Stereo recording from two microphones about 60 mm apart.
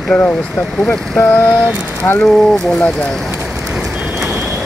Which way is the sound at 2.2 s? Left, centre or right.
Centre.